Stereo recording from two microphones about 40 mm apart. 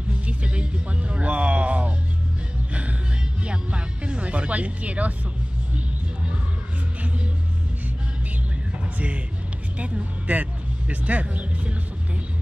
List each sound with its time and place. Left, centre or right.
0.1 s music: right
8.9 s speech: right